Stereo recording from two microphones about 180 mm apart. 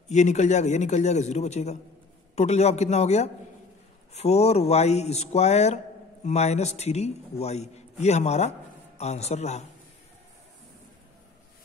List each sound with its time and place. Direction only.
0.1 s a man's voice: 40° left (ahead or behind)